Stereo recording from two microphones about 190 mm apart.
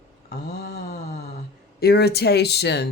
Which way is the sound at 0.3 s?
55° left (ahead or behind).